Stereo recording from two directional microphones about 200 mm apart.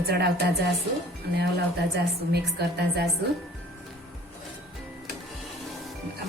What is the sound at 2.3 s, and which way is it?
Speech, 55° right (ahead or behind).